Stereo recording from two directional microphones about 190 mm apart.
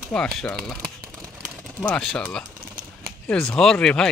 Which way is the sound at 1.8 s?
5° left (ahead or behind).